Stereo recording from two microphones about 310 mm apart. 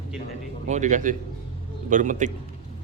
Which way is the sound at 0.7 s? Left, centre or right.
Right.